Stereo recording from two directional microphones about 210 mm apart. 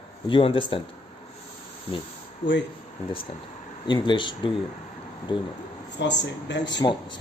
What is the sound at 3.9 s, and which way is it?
Speech, 20° left (ahead or behind).